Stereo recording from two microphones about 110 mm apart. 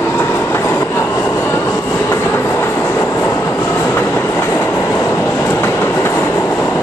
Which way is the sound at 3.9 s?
20° left (ahead or behind).